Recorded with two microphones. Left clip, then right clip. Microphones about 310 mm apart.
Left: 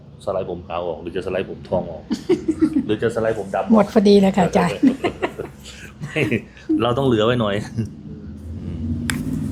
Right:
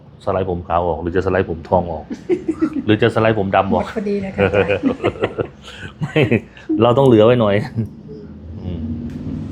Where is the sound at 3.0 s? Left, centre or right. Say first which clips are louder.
Right 5 dB; right.